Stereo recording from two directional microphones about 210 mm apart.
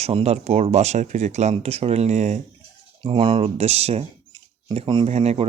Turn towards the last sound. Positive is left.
turn(degrees=-30)  # may be behind; listen again after turning